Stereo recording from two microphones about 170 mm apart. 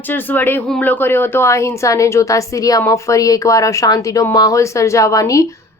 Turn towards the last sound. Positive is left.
turn(degrees=20)  # may be behind; listen again after turning